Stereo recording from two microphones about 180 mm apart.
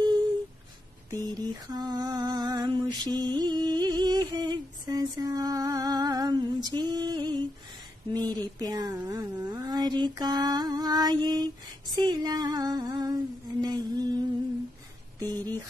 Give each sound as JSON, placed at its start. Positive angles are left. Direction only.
{"t": 1.1, "sound": "mantra", "side_deg": -20}
{"t": 4.3, "sound": "a sound", "side_deg": -20}
{"t": 8.1, "sound": "speech", "side_deg": -20}
{"t": 15.2, "sound": "speech", "side_deg": -20}